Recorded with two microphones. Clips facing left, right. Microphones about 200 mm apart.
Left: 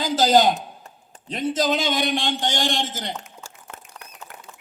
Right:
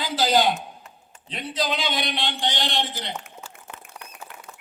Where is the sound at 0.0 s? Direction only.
45° left (ahead or behind).